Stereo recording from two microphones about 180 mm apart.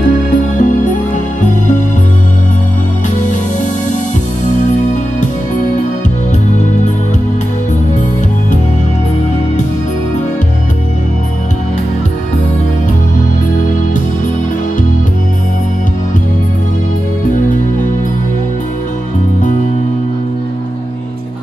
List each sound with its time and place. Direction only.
0.6 s music: 45° left (ahead or behind)